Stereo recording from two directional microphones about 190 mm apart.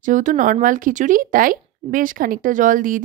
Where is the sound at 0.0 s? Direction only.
40° right (ahead or behind).